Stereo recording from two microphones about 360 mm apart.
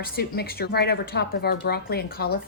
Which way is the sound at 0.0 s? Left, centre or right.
Left.